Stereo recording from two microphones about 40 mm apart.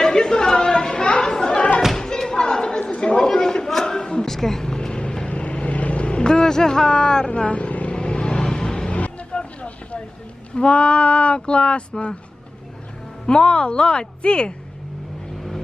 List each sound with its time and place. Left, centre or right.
0.0 s chatter: centre
2.0 s slam: centre
2.9 s chatter: left
3.2 s vehicle: centre
7.3 s vehicle: left
7.9 s vehicle: left
8.9 s vehicle: left
10.5 s speech: left
13.2 s speech: left